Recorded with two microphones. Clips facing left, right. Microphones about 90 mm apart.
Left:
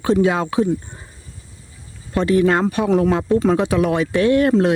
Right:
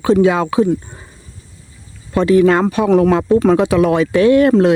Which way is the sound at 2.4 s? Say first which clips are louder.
Right 4 dB; 90° right.